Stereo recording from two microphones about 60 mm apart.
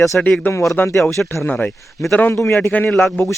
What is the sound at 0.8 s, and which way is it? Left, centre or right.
Speech, left.